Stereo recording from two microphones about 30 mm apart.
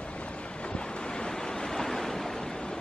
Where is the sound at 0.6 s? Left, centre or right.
Left.